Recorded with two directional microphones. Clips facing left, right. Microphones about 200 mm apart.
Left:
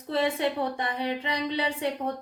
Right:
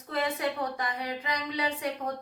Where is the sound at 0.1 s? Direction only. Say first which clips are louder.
Left 4 dB; 30° left (ahead or behind).